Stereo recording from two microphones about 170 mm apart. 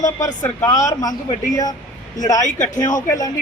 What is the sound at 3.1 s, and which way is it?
Speech, 20° left (ahead or behind).